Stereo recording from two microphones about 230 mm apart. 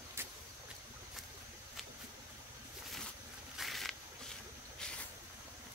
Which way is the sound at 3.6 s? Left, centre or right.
Centre.